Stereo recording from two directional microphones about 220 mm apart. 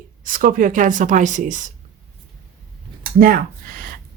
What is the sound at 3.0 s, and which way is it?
Speech, 40° right (ahead or behind).